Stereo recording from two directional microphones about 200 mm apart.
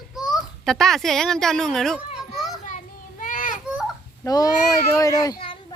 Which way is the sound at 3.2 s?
40° left (ahead or behind).